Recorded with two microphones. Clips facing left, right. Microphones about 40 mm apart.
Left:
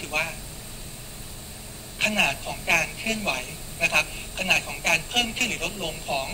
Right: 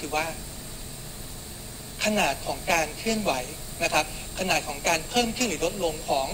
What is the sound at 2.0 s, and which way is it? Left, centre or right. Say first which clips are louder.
A man's voice: left 1 dB; left.